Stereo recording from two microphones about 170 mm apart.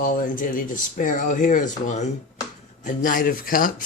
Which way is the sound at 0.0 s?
55° left (ahead or behind).